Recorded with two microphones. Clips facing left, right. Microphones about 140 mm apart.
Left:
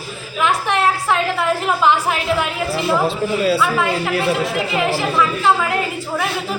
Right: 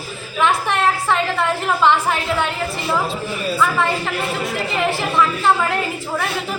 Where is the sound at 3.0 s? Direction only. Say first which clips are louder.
Left 6 dB; 75° left (ahead or behind).